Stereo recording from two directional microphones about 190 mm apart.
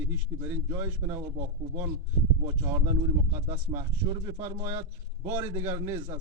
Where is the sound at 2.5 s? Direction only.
15° right (ahead or behind).